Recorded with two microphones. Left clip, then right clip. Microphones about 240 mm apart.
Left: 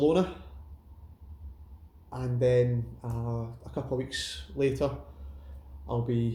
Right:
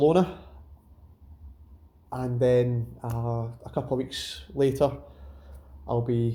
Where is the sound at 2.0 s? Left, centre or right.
Right.